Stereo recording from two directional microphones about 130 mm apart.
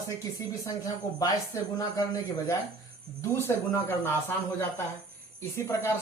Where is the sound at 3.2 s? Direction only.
20° left (ahead or behind).